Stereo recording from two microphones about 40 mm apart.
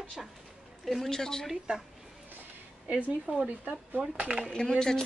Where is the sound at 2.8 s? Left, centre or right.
Right.